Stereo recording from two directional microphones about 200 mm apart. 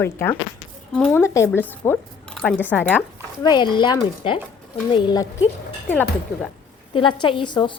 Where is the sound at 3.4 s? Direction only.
20° left (ahead or behind).